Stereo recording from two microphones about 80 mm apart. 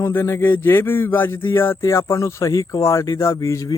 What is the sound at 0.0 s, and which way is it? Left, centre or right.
Speech, left.